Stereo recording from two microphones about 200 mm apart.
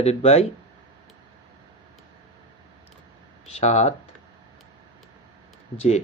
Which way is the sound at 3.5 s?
35° left (ahead or behind).